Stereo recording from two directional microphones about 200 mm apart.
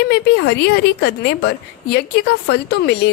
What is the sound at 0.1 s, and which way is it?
A woman's voice, 55° left (ahead or behind).